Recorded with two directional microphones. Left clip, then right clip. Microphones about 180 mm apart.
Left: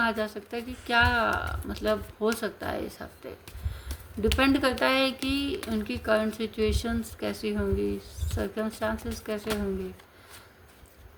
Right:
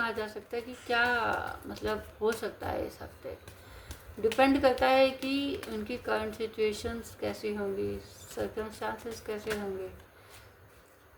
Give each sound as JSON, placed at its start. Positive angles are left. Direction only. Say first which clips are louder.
{"t": 0.0, "sound": "speech", "louder": "left 5 dB", "side_deg": 40}